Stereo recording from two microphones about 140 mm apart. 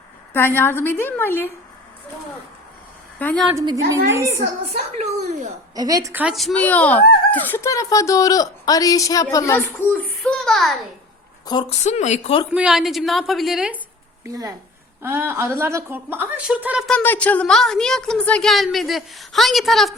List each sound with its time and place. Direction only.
0.3 s a woman's voice: 15° left (ahead or behind)
3.2 s a woman's voice: 10° left (ahead or behind)
3.5 s a woman's voice: 20° right (ahead or behind)
4.7 s a woman's voice: 50° right (ahead or behind)
5.7 s a woman's voice: 25° right (ahead or behind)
6.3 s a woman's voice: 5° left (ahead or behind)
10.2 s a sound: 5° left (ahead or behind)
11.7 s speech: 55° left (ahead or behind)
12.5 s a woman's voice: 5° right (ahead or behind)
14.3 s a woman's voice: 25° right (ahead or behind); by 16.8 s 10° right (ahead or behind)
17.0 s a woman's voice: 10° left (ahead or behind)